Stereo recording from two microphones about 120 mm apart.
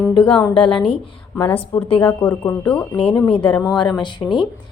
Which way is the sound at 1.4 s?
25° left (ahead or behind).